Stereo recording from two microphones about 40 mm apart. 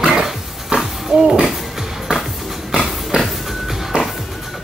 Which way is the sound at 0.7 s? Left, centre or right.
Right.